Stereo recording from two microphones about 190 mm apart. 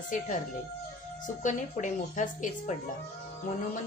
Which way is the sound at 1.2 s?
40° left (ahead or behind).